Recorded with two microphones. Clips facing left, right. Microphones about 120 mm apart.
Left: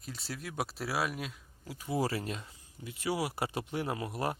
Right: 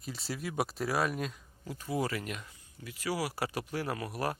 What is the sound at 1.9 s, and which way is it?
Speech, 30° left (ahead or behind).